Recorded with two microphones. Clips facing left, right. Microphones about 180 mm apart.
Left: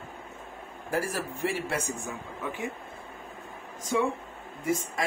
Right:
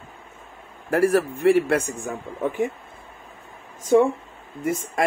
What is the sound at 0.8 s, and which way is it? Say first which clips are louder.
A man's voice: right 12 dB; 60° right (ahead or behind).